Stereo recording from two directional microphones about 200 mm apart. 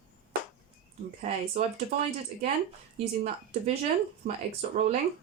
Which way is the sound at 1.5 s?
30° right (ahead or behind).